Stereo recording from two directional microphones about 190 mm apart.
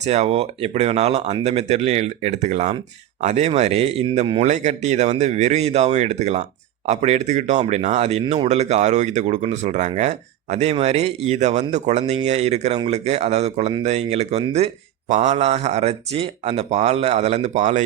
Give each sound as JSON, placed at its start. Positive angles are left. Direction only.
{"t": 0.0, "sound": "speech", "side_deg": -35}